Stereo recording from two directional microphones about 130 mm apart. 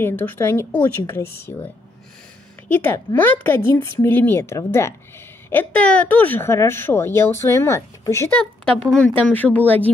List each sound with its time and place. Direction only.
0.0 s a woman's voice: 15° left (ahead or behind)
2.7 s speech: 15° left (ahead or behind)